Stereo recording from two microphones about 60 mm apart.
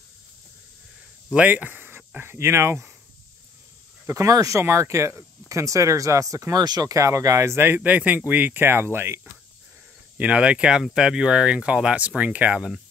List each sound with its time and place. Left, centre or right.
1.3 s speech: right
2.3 s speech: right
4.1 s speech: right
4.6 s speech: right
7.6 s speech: right
10.1 s speech: right
12.5 s speech: centre